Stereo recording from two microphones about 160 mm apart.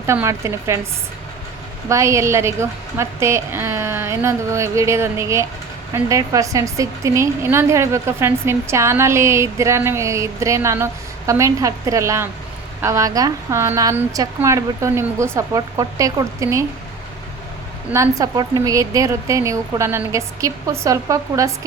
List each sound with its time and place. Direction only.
0.1 s a woman's voice: 15° right (ahead or behind)
1.9 s a woman's voice: 20° right (ahead or behind)
17.9 s a woman's voice: 20° right (ahead or behind)